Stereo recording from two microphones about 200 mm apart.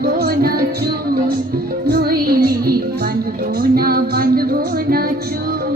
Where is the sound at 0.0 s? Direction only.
50° right (ahead or behind).